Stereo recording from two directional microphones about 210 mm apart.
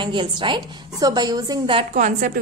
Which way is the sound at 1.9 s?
35° right (ahead or behind).